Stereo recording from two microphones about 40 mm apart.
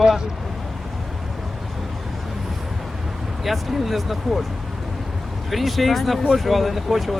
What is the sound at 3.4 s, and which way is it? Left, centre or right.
Speech, centre.